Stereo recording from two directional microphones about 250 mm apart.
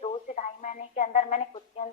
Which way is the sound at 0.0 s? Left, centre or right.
Left.